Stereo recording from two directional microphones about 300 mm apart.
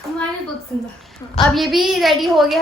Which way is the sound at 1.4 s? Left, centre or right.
Centre.